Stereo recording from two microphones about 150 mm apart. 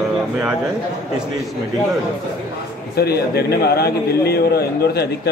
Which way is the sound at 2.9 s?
90° left.